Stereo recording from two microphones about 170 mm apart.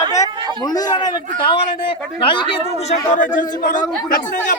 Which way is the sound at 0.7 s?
25° left (ahead or behind).